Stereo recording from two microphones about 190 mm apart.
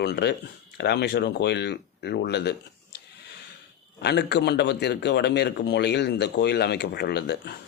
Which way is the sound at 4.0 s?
60° left (ahead or behind).